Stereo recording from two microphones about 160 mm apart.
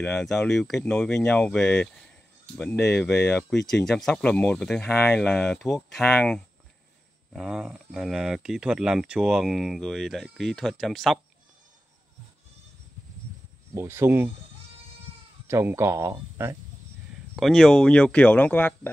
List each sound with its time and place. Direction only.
0.0 s speech: 5° left (ahead or behind)
13.7 s speech: 15° right (ahead or behind)
15.4 s speech: 15° right (ahead or behind)
17.4 s speech: 5° left (ahead or behind)